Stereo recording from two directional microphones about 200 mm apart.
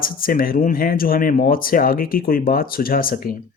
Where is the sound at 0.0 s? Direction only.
45° left (ahead or behind).